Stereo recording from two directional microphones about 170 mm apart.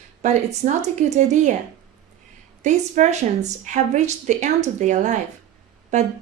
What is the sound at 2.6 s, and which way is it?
Speech, 45° right (ahead or behind).